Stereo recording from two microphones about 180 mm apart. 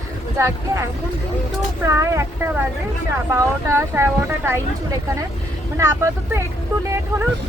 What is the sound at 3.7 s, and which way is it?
A woman's voice, 15° right (ahead or behind).